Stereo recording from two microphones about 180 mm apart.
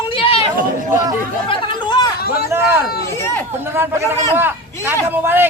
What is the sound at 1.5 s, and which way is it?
Chatter, 30° left (ahead or behind).